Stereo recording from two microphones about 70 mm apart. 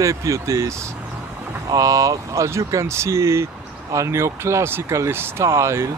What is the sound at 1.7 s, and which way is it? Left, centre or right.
Speech, right.